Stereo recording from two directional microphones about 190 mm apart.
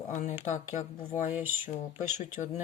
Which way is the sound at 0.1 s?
40° left (ahead or behind).